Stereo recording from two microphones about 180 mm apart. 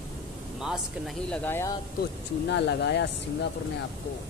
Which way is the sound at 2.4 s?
75° left (ahead or behind).